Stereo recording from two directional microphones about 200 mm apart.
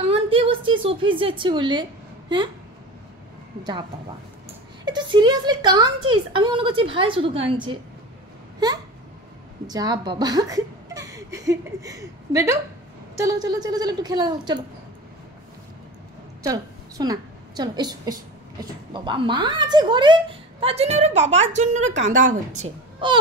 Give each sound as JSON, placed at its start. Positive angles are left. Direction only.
{"t": 0.0, "sound": "a sound", "side_deg": -25}
{"t": 1.4, "sound": "a woman's voice", "side_deg": -25}
{"t": 4.8, "sound": "a woman's voice", "side_deg": -20}
{"t": 9.7, "sound": "a woman's voice", "side_deg": -20}
{"t": 16.4, "sound": "a woman's voice", "side_deg": -20}